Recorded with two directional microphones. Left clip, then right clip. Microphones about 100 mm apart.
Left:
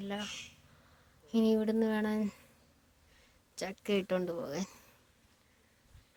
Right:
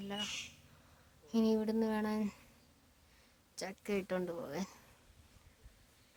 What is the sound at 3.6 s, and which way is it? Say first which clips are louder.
A woman's voice: left 5 dB; 35° left (ahead or behind).